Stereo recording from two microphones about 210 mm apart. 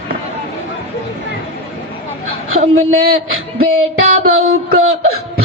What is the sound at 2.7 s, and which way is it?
Speech, 75° right (ahead or behind).